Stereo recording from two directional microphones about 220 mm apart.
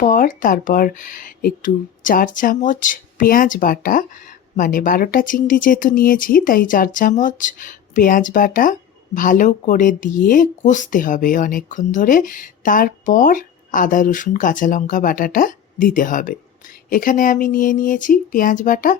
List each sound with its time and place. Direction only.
0.0 s speech: 35° left (ahead or behind)